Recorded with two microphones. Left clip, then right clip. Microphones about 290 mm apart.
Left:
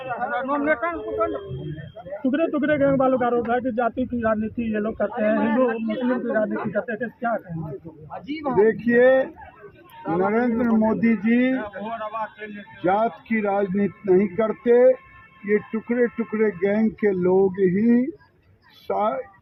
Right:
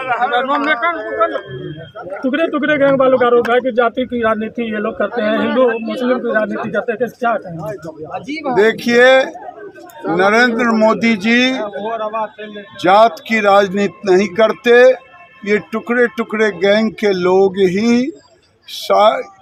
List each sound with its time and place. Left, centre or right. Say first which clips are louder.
0.3 s speech: right 5 dB; right
10.0 s speech: right 10 dB; right